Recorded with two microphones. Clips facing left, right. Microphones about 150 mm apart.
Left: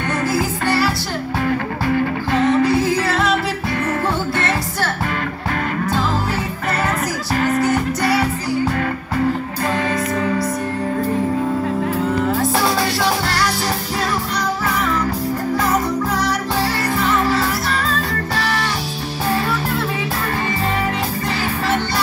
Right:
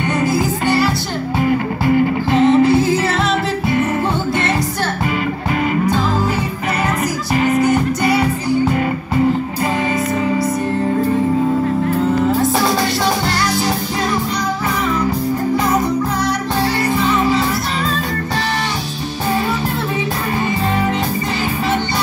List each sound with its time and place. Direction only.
0.2 s music: 20° right (ahead or behind)
7.3 s music: 10° right (ahead or behind)
16.9 s music: 20° right (ahead or behind)